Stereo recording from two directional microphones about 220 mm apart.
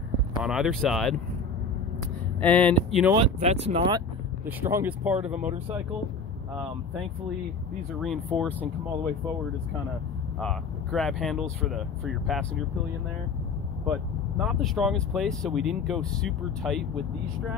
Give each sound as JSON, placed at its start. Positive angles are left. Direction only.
{"t": 0.4, "sound": "speech", "side_deg": 0}
{"t": 2.4, "sound": "speech", "side_deg": 5}
{"t": 3.2, "sound": "speech", "side_deg": -30}
{"t": 4.5, "sound": "speech", "side_deg": -10}
{"t": 10.4, "sound": "speech", "side_deg": 0}
{"t": 14.4, "sound": "speech", "side_deg": 0}